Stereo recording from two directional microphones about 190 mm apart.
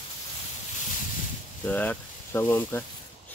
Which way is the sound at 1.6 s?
10° left (ahead or behind).